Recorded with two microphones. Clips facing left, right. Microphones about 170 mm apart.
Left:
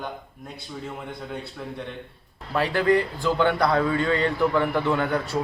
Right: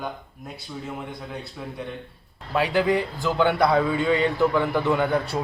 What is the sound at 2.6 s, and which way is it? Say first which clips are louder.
A man's voice: even; 5° right (ahead or behind).